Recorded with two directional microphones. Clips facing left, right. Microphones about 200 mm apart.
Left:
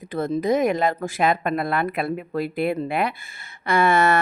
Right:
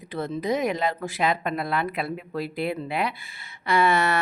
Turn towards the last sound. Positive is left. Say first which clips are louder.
# left 3 dB
turn(degrees=50)  # may be behind; listen again after turning